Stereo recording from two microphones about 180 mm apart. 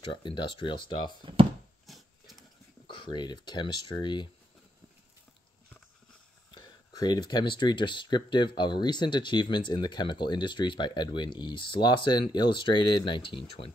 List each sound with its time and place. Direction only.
0.0 s speech: 25° left (ahead or behind)
1.2 s speech: 30° right (ahead or behind)
1.9 s a sound: centre (ahead or behind)
2.9 s speech: 25° left (ahead or behind)
6.5 s a sound: 20° left (ahead or behind)
7.5 s speech: 25° left (ahead or behind)